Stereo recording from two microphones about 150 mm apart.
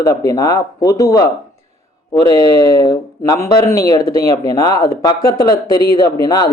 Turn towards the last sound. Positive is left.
turn(degrees=25)  # may be behind; listen again after turning